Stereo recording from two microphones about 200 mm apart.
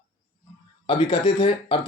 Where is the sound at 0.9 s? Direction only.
25° left (ahead or behind).